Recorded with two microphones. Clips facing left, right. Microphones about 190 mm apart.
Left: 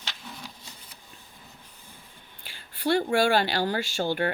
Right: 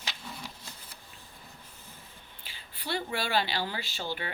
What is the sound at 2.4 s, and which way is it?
Speech, 50° left (ahead or behind).